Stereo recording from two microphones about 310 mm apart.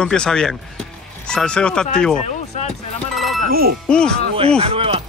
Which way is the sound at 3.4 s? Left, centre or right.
Right.